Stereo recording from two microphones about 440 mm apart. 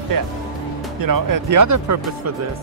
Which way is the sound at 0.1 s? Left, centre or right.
Right.